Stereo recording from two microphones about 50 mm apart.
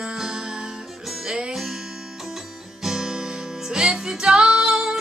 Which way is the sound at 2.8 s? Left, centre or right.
Centre.